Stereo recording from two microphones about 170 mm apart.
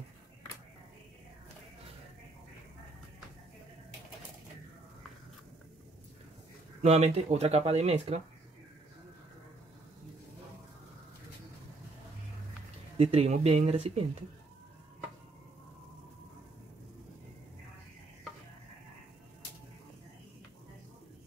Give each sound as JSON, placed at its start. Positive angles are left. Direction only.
{"t": 6.8, "sound": "speech", "side_deg": -40}
{"t": 12.9, "sound": "speech", "side_deg": -35}